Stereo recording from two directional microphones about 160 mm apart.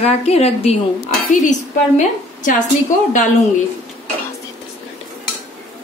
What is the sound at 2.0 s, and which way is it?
Speech, 50° left (ahead or behind).